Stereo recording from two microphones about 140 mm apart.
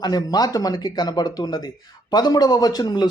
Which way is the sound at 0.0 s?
30° left (ahead or behind).